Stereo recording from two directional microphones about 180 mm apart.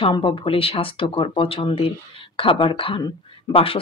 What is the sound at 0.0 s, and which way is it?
Speech, 30° left (ahead or behind).